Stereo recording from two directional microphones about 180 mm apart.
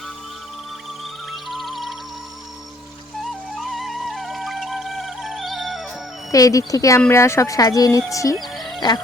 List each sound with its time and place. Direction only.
1.3 s music: centre (ahead or behind)
3.6 s music: centre (ahead or behind)
6.3 s speech: 20° left (ahead or behind)
8.4 s music: centre (ahead or behind)